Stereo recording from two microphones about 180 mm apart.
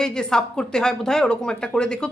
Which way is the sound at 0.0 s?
5° left (ahead or behind).